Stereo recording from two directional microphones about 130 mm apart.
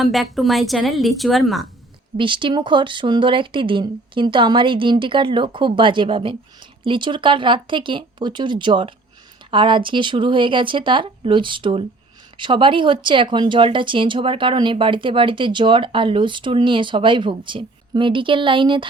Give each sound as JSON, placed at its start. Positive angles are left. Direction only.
{"t": 0.0, "sound": "a woman's voice", "side_deg": 0}
{"t": 2.1, "sound": "speech", "side_deg": -40}